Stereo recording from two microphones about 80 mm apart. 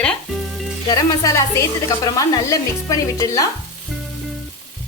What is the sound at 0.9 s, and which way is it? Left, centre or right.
Speech, left.